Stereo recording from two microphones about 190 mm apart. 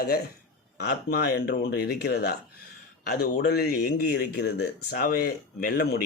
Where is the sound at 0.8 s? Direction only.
55° left (ahead or behind).